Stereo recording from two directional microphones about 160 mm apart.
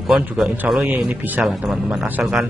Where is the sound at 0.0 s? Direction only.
Centre (ahead or behind).